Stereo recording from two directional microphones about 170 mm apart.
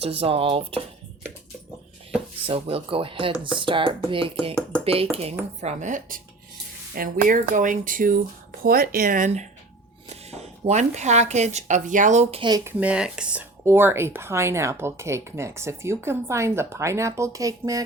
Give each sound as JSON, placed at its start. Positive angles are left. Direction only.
{"t": 0.0, "sound": "speech", "side_deg": -35}
{"t": 2.5, "sound": "speech", "side_deg": -35}
{"t": 12.6, "sound": "speech", "side_deg": -5}